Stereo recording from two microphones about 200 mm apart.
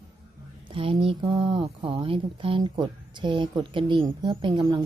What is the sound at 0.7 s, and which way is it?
Speech, 25° right (ahead or behind).